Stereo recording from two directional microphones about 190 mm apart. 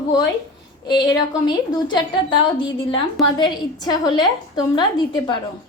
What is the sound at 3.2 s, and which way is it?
A woman's voice, 20° left (ahead or behind).